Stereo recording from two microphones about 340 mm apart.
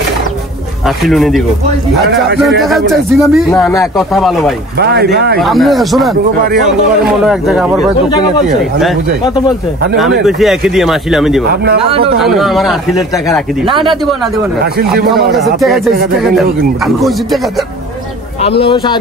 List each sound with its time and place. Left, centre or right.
0.8 s speech: centre
2.6 s speech: centre
4.7 s speech: right
5.4 s speech: centre
10.2 s speech: centre
11.4 s speech: right
12.2 s speech: centre
14.6 s speech: right
15.3 s speech: centre
18.6 s speech: centre